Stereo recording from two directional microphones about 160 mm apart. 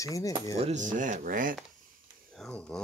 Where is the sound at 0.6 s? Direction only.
45° right (ahead or behind).